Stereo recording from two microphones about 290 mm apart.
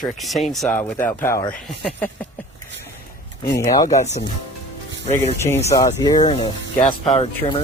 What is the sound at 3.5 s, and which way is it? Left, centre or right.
Speech, centre.